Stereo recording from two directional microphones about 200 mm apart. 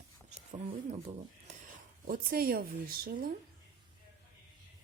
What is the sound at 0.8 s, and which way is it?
Speech, 35° right (ahead or behind).